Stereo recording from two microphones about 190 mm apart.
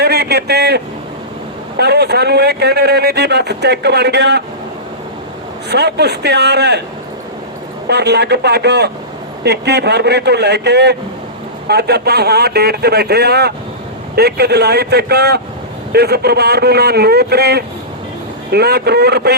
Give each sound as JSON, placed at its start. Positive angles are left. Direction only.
{"t": 0.0, "sound": "a sound", "side_deg": -60}
{"t": 1.8, "sound": "a man's voice", "side_deg": -60}
{"t": 5.6, "sound": "a man's voice", "side_deg": -60}
{"t": 7.9, "sound": "a man's voice", "side_deg": -60}